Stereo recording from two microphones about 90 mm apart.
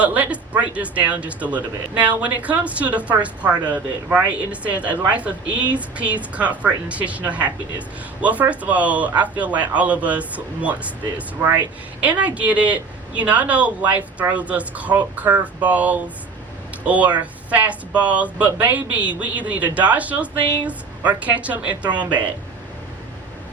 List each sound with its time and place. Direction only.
0.0 s speech: 15° right (ahead or behind)
12.0 s speech: 15° right (ahead or behind)